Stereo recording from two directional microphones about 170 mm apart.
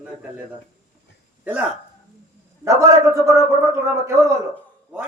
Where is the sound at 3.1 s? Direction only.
20° right (ahead or behind).